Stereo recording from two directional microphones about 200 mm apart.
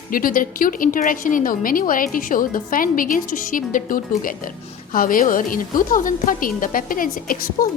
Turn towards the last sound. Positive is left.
turn(degrees=45)  # may be behind; listen again after turning